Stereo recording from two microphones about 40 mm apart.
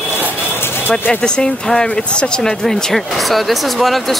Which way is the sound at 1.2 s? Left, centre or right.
Centre.